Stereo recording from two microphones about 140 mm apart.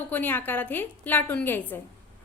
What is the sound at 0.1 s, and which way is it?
A woman's voice, 15° left (ahead or behind).